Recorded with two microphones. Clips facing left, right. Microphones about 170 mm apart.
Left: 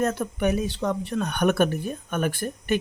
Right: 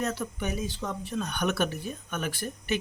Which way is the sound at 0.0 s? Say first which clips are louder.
Left 7 dB; 50° left (ahead or behind).